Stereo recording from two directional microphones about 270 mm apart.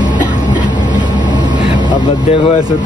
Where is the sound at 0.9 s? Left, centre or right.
Centre.